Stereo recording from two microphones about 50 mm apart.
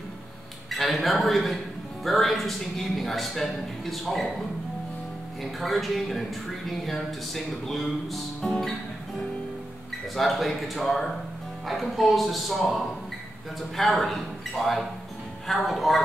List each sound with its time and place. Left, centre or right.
0.7 s a man's voice: centre
5.4 s speech: centre
10.1 s speech: centre